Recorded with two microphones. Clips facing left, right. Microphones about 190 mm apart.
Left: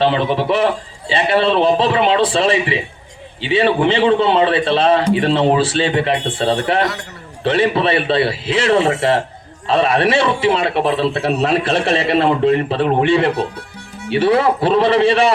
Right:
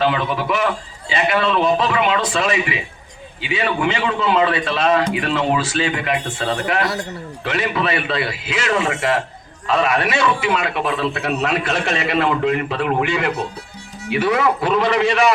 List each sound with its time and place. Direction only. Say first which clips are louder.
0.0 s a man's voice: left 4 dB; 30° left (ahead or behind)